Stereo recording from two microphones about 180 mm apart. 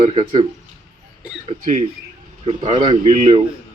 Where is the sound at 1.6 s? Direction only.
40° right (ahead or behind).